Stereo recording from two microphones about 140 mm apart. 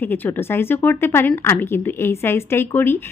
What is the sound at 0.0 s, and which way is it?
Speech, 15° left (ahead or behind).